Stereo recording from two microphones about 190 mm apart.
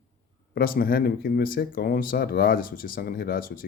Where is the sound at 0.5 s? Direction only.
50° left (ahead or behind).